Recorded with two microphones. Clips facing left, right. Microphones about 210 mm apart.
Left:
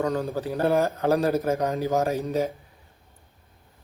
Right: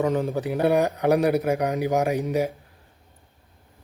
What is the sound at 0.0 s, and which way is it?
A man's voice, 20° right (ahead or behind).